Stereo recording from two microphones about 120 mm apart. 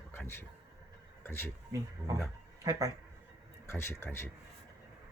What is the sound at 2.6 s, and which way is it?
Speech, 30° right (ahead or behind).